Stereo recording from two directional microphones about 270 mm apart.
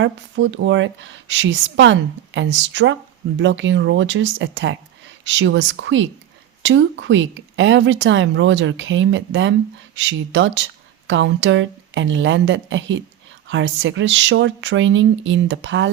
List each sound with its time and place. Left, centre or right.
0.0 s speech: right